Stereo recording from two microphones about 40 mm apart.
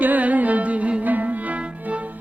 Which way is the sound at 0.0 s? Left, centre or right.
Right.